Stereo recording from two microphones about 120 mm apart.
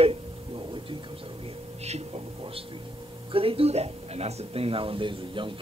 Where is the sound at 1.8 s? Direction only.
60° right (ahead or behind).